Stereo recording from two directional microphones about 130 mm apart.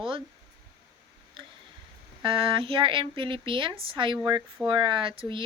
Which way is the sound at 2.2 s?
40° right (ahead or behind).